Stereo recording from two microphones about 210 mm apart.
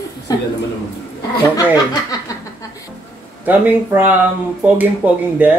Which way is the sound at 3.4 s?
10° right (ahead or behind).